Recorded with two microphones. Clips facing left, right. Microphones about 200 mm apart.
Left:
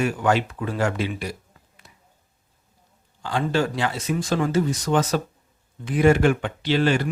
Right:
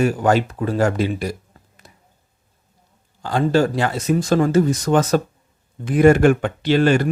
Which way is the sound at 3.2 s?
40° right (ahead or behind).